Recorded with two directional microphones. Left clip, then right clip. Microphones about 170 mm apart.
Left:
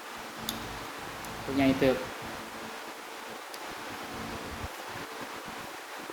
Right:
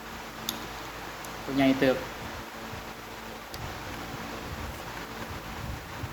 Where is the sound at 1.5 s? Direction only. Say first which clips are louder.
Right 2 dB; 40° right (ahead or behind).